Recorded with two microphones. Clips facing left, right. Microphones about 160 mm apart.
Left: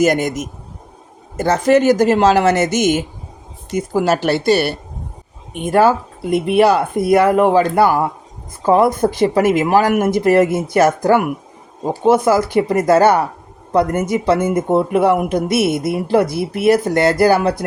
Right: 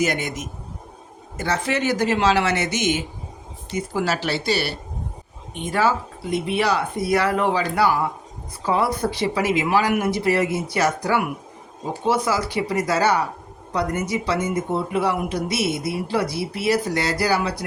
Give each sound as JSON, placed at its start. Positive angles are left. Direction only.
{"t": 0.0, "sound": "speech", "side_deg": 45}